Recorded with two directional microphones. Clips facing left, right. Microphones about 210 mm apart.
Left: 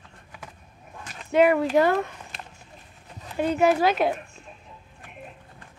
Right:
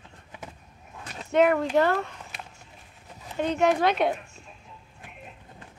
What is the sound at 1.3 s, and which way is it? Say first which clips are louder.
Speech: left 2 dB; 5° left (ahead or behind).